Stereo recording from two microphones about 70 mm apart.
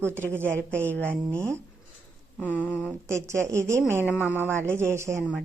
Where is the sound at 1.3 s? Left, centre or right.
Right.